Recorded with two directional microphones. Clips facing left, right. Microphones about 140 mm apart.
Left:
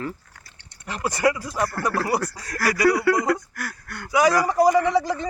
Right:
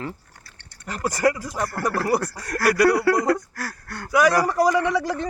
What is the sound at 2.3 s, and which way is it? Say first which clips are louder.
Speech: right 4 dB; 60° right (ahead or behind).